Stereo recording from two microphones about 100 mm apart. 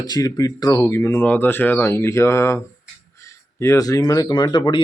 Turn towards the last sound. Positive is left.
turn(degrees=45)  # may be behind; listen again after turning